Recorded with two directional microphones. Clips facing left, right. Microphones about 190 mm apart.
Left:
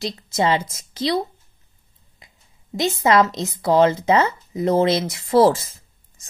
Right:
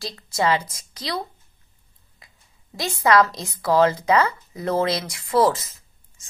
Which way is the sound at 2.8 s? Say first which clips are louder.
Left 2 dB; 20° left (ahead or behind).